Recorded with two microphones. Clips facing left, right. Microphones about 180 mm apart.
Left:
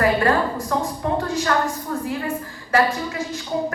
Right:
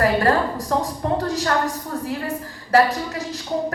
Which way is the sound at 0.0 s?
40° right (ahead or behind).